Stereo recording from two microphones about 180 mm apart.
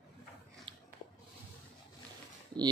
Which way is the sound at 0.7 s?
30° right (ahead or behind).